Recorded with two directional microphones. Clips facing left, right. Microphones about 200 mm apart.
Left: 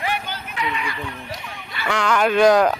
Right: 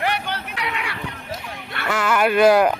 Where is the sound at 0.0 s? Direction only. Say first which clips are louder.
Right 2 dB; 70° right (ahead or behind).